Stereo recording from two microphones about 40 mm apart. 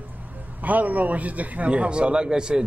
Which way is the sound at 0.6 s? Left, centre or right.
Right.